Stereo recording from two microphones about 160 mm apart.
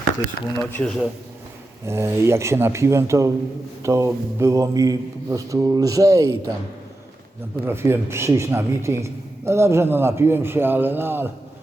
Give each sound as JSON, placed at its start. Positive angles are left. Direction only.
{"t": 0.5, "sound": "speech", "side_deg": 10}
{"t": 1.9, "sound": "a man's voice", "side_deg": -15}
{"t": 3.8, "sound": "mantra", "side_deg": -15}
{"t": 7.6, "sound": "a man's voice", "side_deg": -15}